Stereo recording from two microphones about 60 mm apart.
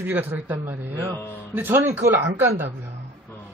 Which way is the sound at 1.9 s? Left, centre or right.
Right.